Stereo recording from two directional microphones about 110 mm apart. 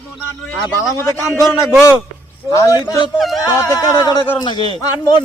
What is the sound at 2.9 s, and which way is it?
Speech, 45° left (ahead or behind).